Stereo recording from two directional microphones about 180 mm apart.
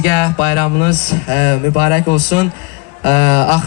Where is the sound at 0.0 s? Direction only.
40° left (ahead or behind).